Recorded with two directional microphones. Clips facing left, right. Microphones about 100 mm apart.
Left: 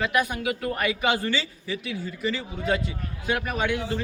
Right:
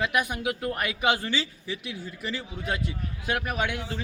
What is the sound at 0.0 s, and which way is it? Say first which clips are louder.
A man's voice: left 2 dB; 15° right (ahead or behind).